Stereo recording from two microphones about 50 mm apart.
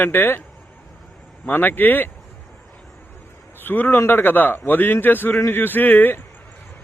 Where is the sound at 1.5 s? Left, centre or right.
Left.